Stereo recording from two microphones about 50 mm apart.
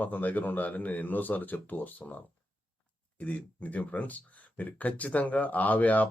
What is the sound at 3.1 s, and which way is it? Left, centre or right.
Speech, left.